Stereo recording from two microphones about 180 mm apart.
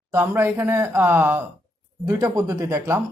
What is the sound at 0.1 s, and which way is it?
A woman's voice, 15° right (ahead or behind).